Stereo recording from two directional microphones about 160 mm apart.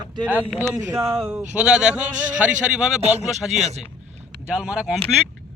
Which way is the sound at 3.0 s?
45° right (ahead or behind).